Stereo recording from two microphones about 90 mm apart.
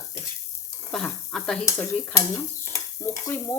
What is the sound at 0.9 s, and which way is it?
Speech, 10° left (ahead or behind).